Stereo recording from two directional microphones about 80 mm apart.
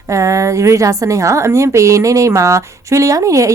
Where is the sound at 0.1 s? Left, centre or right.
Right.